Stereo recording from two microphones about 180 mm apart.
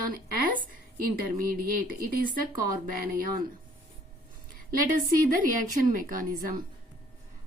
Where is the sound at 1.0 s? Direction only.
55° right (ahead or behind).